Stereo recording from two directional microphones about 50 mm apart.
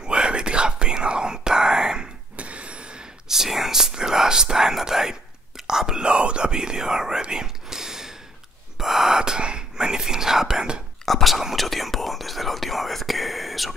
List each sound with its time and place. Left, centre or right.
0.0 s whispering: centre
2.3 s vehicle: right
3.3 s whispering: centre
11.1 s whispering: centre